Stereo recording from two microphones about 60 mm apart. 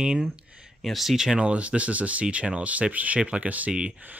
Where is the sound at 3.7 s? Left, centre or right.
Centre.